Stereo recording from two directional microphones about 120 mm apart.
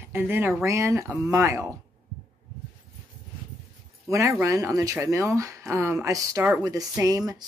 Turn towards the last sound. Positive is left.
turn(degrees=-30)  # may be behind; listen again after turning